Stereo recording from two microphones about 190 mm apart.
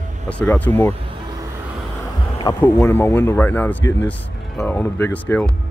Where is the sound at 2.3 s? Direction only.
25° left (ahead or behind).